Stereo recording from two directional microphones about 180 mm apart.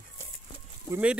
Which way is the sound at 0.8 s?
10° right (ahead or behind).